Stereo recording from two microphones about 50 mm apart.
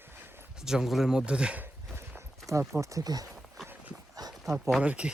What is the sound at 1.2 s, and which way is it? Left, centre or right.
Speech, centre.